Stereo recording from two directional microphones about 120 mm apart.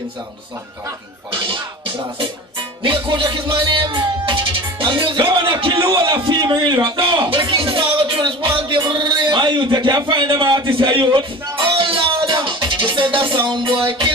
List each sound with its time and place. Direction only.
1.5 s speech: 45° right (ahead or behind)
2.8 s music: 45° right (ahead or behind)